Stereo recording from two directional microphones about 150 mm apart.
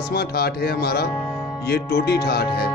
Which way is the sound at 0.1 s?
90° left.